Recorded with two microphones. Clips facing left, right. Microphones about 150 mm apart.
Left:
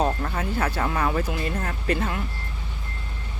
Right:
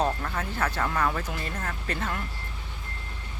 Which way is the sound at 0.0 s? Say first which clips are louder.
Left 3 dB; 15° left (ahead or behind).